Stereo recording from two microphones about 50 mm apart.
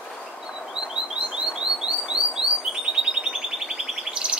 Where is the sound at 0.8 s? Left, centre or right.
Centre.